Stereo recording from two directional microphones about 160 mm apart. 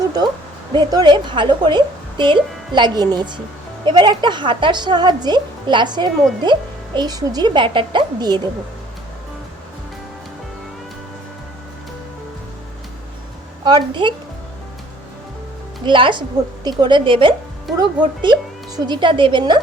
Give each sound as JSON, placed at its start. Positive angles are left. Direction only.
{"t": 0.0, "sound": "a sound", "side_deg": -25}
{"t": 0.7, "sound": "a woman's voice", "side_deg": -25}
{"t": 13.7, "sound": "a woman's voice", "side_deg": -30}
{"t": 15.8, "sound": "a woman's voice", "side_deg": -30}